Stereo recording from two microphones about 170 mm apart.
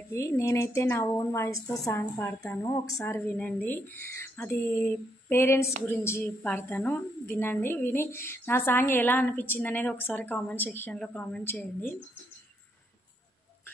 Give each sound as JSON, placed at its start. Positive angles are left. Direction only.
{"t": 0.1, "sound": "a woman's voice", "side_deg": 15}